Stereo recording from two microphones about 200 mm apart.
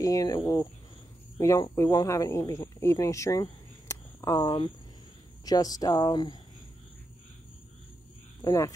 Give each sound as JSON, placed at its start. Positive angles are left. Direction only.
{"t": 0.0, "sound": "speech", "side_deg": 15}
{"t": 8.4, "sound": "speech", "side_deg": 15}